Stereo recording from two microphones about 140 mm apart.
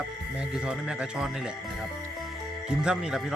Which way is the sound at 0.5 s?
5° right (ahead or behind).